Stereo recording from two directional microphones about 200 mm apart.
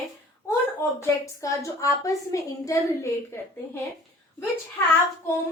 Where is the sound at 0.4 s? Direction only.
15° left (ahead or behind).